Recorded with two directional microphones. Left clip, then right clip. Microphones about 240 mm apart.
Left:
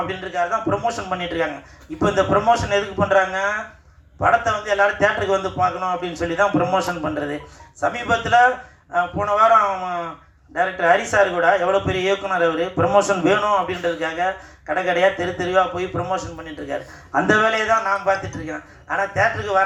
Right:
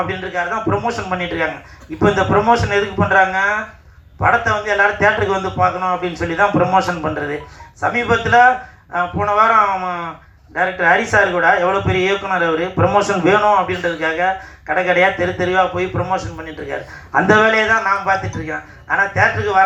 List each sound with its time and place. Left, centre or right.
0.1 s a man's voice: left